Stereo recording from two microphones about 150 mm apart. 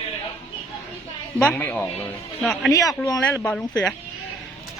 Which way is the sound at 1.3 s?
10° left (ahead or behind).